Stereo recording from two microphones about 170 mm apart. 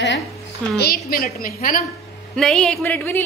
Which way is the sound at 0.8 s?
60° left (ahead or behind).